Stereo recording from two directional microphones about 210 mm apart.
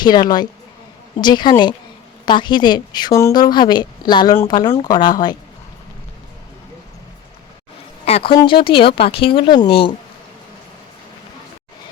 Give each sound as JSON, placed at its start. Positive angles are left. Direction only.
{"t": 0.0, "sound": "a woman's voice", "side_deg": 20}
{"t": 8.0, "sound": "a woman's voice", "side_deg": 25}